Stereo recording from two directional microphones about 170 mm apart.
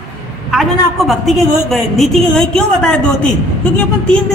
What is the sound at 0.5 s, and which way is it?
A woman's voice, centre (ahead or behind).